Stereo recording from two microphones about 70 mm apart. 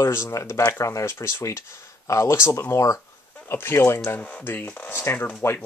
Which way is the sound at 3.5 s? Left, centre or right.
Left.